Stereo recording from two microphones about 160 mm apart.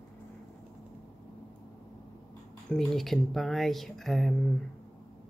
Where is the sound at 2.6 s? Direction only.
Centre (ahead or behind).